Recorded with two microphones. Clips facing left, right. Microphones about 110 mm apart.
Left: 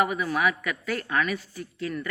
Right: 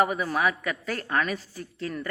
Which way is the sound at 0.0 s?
35° right (ahead or behind).